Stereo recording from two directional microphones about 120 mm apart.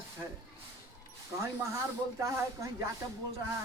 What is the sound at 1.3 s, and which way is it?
Speech, 20° right (ahead or behind).